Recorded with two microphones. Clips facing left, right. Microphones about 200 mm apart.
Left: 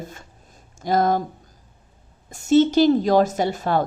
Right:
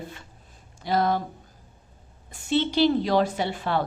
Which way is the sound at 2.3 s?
45° left (ahead or behind).